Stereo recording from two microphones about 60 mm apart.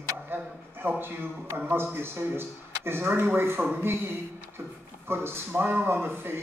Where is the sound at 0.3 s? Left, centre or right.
Right.